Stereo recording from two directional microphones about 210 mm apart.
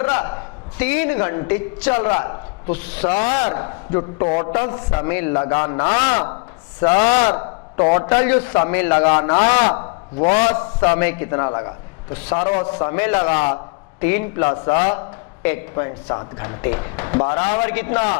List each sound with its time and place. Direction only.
0.0 s a woman's voice: 15° left (ahead or behind)
9.0 s a man's voice: 30° left (ahead or behind)
10.8 s a man's voice: 15° left (ahead or behind); by 12.7 s 30° left (ahead or behind)
12.8 s a man's voice: 15° left (ahead or behind)